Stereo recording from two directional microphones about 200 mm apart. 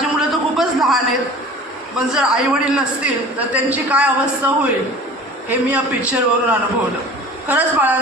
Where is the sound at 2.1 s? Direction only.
5° right (ahead or behind).